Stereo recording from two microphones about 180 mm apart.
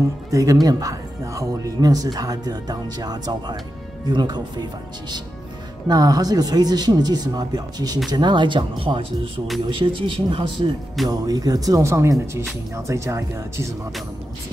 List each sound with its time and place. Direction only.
0.3 s speech: 20° right (ahead or behind)
5.9 s speech: 20° right (ahead or behind)